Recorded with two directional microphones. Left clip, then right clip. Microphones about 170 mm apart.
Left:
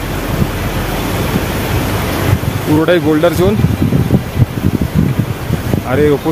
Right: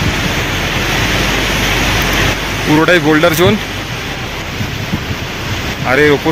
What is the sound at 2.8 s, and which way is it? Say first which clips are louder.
Speech: right 1 dB; 5° left (ahead or behind).